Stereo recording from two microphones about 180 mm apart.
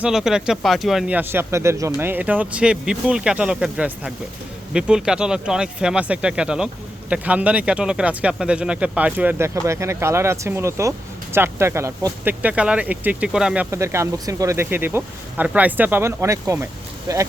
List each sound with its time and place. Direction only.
0.0 s speech: 5° right (ahead or behind); by 17.2 s 20° right (ahead or behind)